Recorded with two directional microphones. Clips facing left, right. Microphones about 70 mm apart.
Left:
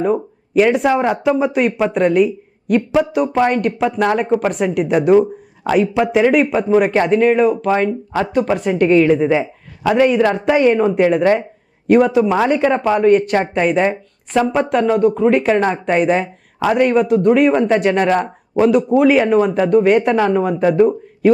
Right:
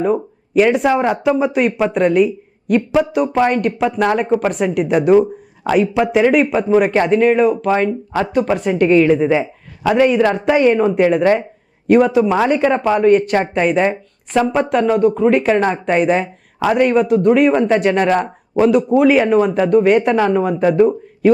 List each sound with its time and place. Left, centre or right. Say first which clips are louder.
0.0 s speech: even; right